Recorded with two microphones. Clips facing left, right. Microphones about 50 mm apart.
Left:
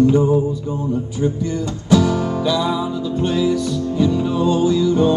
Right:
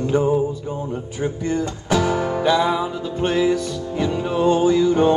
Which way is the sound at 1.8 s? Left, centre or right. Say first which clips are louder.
Left 4 dB; right.